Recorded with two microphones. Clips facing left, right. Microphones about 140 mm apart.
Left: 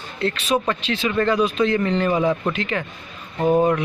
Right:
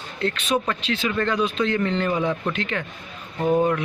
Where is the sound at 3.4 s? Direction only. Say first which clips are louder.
Left 3 dB; 35° left (ahead or behind).